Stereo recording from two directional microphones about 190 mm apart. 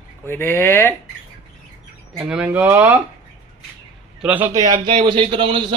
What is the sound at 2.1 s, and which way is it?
Speech, 5° right (ahead or behind).